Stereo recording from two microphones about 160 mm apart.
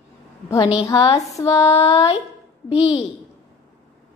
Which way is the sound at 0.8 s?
25° left (ahead or behind).